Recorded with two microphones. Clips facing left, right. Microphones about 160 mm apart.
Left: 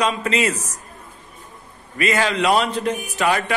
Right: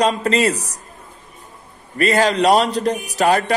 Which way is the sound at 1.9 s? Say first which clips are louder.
Right 4 dB; 40° right (ahead or behind).